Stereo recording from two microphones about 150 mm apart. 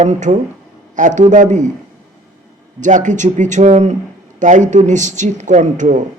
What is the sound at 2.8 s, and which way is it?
A man's voice, 55° right (ahead or behind).